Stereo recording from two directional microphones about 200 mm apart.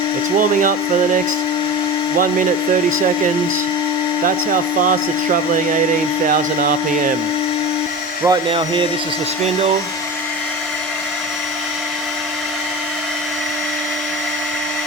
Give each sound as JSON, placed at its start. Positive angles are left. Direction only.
{"t": 4.5, "sound": "speech", "side_deg": -40}
{"t": 6.2, "sound": "speech", "side_deg": -45}
{"t": 8.2, "sound": "speech", "side_deg": -25}